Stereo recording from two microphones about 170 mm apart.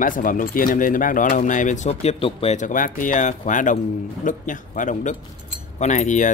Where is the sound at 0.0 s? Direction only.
50° left (ahead or behind).